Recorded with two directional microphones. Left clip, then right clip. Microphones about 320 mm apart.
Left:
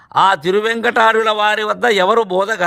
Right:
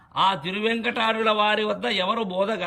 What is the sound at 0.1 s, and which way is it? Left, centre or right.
A man's voice, centre.